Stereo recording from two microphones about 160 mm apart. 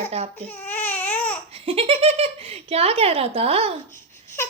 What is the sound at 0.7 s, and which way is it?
Baby cry, 10° left (ahead or behind).